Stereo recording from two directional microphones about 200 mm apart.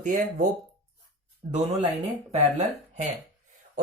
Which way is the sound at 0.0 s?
40° right (ahead or behind).